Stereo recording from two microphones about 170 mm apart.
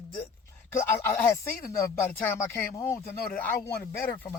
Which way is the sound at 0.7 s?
15° left (ahead or behind).